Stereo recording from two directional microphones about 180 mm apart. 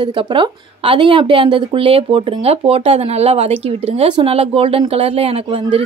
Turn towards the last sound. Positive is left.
turn(degrees=-30)  # may be behind; listen again after turning